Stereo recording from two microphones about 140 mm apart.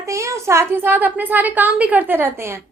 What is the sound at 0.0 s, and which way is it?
A woman's voice, 20° right (ahead or behind).